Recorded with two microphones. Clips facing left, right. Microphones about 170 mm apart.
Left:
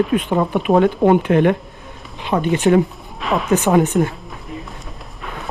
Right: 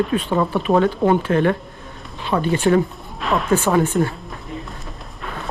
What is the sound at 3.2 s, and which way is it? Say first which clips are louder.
Speech: left 1 dB; centre (ahead or behind).